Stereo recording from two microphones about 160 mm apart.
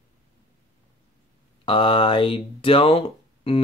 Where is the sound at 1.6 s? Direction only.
30° left (ahead or behind).